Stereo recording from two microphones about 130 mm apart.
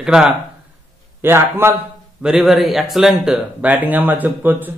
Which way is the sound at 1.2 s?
20° right (ahead or behind).